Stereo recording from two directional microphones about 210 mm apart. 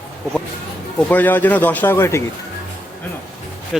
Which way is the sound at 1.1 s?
10° left (ahead or behind).